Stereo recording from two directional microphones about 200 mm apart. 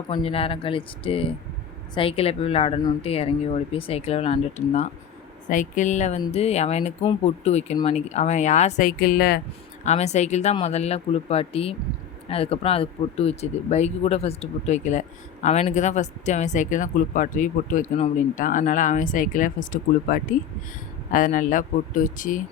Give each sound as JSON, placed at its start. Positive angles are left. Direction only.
{"t": 0.1, "sound": "speech", "side_deg": 30}
{"t": 9.8, "sound": "speech", "side_deg": 35}